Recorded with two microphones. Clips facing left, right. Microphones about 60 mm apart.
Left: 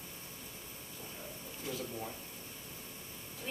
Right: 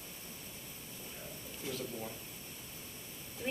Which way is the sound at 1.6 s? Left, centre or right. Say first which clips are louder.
Even; centre.